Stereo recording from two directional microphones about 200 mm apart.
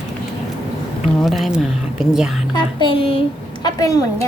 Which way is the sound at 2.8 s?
25° left (ahead or behind).